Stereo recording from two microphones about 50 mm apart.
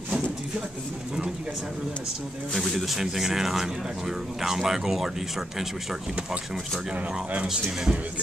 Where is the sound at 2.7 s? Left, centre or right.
Centre.